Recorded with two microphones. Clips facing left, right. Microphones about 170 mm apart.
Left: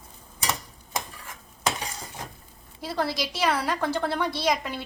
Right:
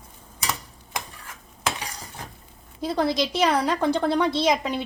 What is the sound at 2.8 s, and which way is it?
A woman's voice, 20° right (ahead or behind).